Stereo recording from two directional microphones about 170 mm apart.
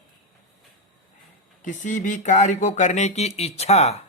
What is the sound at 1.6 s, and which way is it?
Speech, 45° left (ahead or behind).